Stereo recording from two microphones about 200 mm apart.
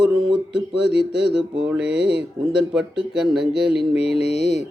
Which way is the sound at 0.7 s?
60° right (ahead or behind).